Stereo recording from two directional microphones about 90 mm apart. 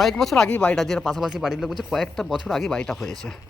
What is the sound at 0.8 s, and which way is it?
Speech, 5° left (ahead or behind).